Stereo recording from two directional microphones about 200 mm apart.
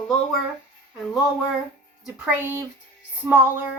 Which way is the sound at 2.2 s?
10° right (ahead or behind).